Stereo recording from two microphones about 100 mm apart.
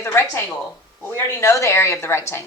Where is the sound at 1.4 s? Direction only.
30° left (ahead or behind).